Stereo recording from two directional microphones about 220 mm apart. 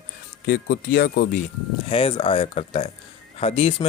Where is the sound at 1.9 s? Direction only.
25° left (ahead or behind).